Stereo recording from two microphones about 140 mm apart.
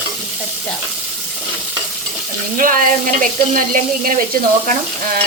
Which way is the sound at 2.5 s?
80° right.